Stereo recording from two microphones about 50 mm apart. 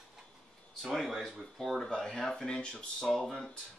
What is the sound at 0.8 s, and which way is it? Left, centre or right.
Speech, centre.